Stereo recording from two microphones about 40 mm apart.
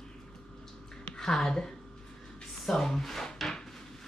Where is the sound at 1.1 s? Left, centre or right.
Centre.